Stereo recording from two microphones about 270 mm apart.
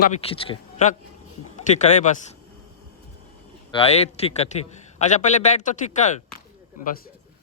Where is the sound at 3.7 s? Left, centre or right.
Left.